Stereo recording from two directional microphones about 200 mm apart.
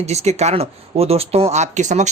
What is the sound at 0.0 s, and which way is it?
Speech, 35° right (ahead or behind).